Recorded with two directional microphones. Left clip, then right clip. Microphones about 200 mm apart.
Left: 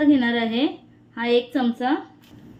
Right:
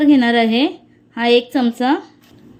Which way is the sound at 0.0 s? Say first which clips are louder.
Right 6 dB; 45° right (ahead or behind).